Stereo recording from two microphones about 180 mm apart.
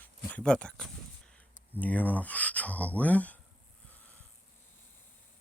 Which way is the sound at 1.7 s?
10° left (ahead or behind).